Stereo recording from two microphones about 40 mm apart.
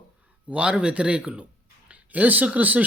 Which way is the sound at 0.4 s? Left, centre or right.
Right.